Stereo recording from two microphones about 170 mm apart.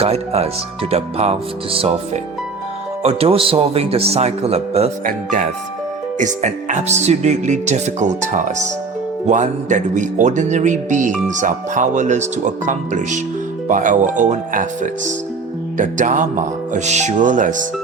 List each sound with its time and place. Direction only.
0.0 s speech: 35° right (ahead or behind)
3.0 s speech: 35° right (ahead or behind)
6.1 s speech: 45° right (ahead or behind)